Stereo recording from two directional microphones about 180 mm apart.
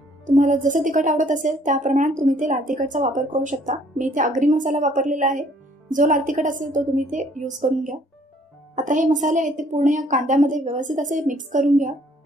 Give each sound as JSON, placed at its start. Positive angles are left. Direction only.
{"t": 0.3, "sound": "a woman's voice", "side_deg": -45}